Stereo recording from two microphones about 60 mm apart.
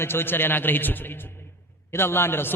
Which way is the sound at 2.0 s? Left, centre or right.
Left.